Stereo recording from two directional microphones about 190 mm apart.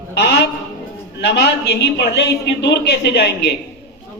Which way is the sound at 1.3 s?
65° left (ahead or behind).